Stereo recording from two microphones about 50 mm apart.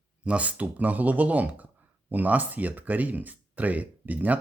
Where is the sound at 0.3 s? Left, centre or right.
Right.